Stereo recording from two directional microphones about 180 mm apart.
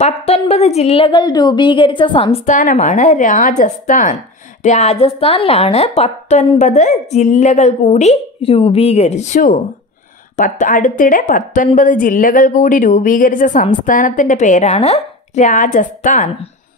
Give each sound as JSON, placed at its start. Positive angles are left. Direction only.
{"t": 0.0, "sound": "a woman's voice", "side_deg": 35}
{"t": 2.4, "sound": "a woman's voice", "side_deg": 45}